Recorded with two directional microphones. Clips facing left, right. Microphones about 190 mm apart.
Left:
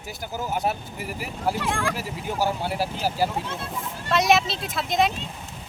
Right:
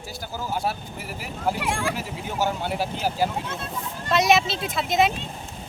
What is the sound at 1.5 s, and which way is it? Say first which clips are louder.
Speech: even; 15° right (ahead or behind).